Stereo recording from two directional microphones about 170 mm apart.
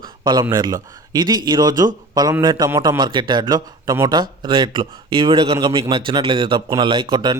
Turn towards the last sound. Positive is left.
turn(degrees=-25)  # may be behind; listen again after turning